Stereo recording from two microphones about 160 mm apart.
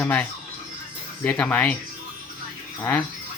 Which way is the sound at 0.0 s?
10° left (ahead or behind).